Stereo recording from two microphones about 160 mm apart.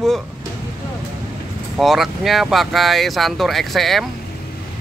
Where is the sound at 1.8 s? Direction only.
Centre (ahead or behind).